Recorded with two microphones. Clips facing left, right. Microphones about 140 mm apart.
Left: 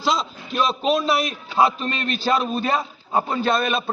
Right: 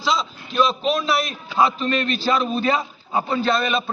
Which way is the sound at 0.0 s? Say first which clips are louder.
Even; 45° left (ahead or behind).